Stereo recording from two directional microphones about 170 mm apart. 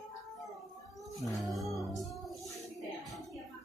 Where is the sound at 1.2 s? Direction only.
Centre (ahead or behind).